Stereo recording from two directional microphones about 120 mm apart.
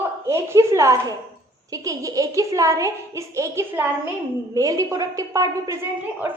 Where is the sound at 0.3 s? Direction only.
20° right (ahead or behind).